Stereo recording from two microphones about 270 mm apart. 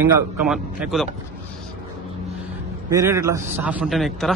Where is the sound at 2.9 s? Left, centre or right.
Centre.